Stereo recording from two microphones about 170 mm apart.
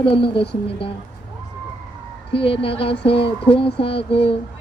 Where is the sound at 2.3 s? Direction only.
30° left (ahead or behind).